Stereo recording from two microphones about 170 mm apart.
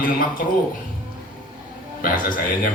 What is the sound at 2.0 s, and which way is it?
Speech, 55° left (ahead or behind).